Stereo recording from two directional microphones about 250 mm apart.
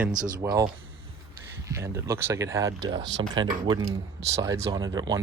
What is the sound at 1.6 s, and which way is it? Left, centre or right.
Speech, centre.